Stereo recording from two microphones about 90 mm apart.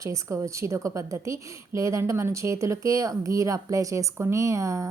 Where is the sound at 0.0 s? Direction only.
35° right (ahead or behind).